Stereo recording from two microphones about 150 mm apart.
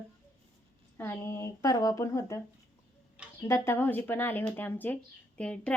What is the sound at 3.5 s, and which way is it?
A woman's voice, 15° left (ahead or behind).